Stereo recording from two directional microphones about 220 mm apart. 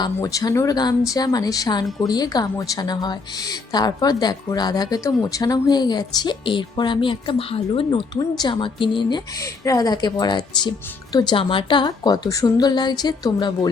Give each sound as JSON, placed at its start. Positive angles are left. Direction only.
{"t": 0.0, "sound": "a woman's voice", "side_deg": 15}